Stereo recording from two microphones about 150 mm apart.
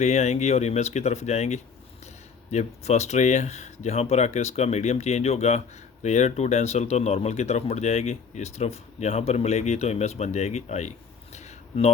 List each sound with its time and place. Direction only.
0.0 s speech: 50° left (ahead or behind)